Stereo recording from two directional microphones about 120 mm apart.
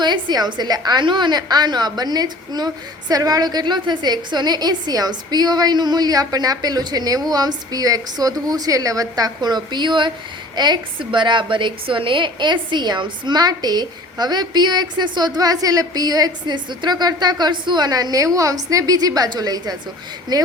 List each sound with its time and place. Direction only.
0.0 s a woman's voice: 35° right (ahead or behind)